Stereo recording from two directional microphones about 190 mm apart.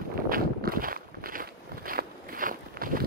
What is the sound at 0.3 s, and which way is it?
Walk, 50° right (ahead or behind).